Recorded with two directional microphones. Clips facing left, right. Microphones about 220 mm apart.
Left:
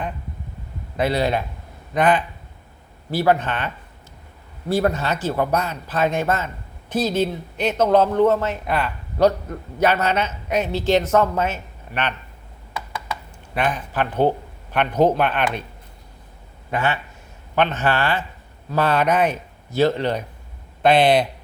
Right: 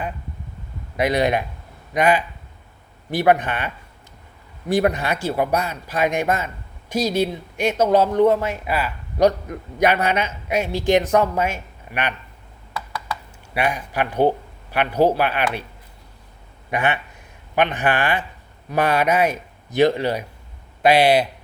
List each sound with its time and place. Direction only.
0.9 s speech: 15° right (ahead or behind)
4.7 s speech: 15° right (ahead or behind)
13.5 s speech: 10° right (ahead or behind)
16.7 s speech: 15° right (ahead or behind)